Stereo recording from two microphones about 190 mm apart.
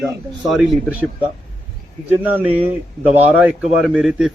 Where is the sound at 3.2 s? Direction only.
5° right (ahead or behind).